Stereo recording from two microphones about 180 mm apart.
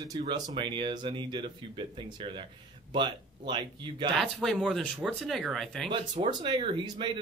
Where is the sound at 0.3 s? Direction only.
25° right (ahead or behind).